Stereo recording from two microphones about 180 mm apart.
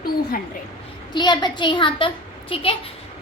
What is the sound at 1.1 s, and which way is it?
A child's voice, 25° left (ahead or behind).